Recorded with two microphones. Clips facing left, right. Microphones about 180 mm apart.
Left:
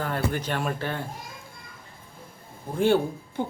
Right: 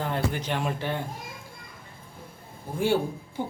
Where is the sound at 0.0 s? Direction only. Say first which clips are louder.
Left 1 dB; 15° right (ahead or behind).